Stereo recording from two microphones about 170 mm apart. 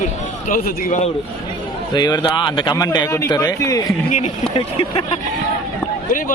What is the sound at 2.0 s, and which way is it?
A man's voice, 25° left (ahead or behind).